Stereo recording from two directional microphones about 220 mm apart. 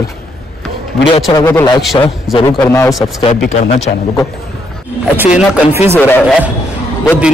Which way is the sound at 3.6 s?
30° left (ahead or behind).